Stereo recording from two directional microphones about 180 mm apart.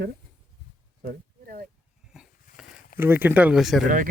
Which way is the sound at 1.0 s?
55° right (ahead or behind).